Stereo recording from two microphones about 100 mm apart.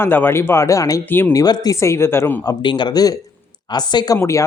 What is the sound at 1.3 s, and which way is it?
Speech, 40° left (ahead or behind).